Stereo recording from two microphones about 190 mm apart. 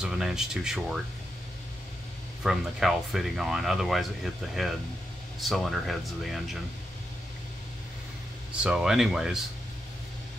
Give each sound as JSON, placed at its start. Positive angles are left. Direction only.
{"t": 0.0, "sound": "speech", "side_deg": -5}
{"t": 2.4, "sound": "speech", "side_deg": 0}
{"t": 8.6, "sound": "speech", "side_deg": -5}